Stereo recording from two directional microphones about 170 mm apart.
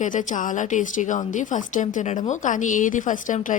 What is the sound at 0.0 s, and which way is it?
Speech, 45° left (ahead or behind).